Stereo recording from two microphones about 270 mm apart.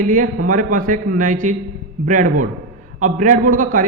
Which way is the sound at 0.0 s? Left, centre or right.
Right.